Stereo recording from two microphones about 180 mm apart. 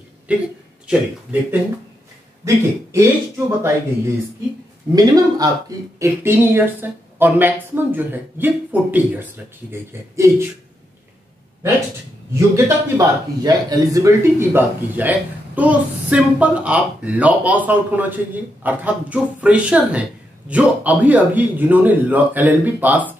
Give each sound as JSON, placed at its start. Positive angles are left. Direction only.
{"t": 0.3, "sound": "a man's voice", "side_deg": -5}
{"t": 5.9, "sound": "a man's voice", "side_deg": -15}
{"t": 12.4, "sound": "a man's voice", "side_deg": -15}